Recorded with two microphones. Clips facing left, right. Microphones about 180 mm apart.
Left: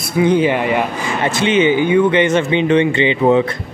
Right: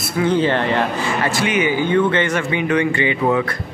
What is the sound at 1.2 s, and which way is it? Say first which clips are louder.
A man's voice: left 6 dB; 20° left (ahead or behind).